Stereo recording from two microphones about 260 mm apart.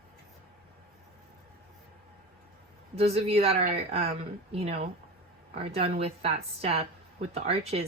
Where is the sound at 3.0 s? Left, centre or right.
Right.